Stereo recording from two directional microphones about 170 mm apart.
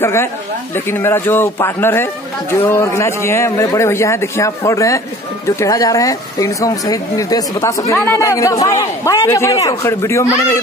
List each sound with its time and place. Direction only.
0.0 s a man's voice: 15° left (ahead or behind)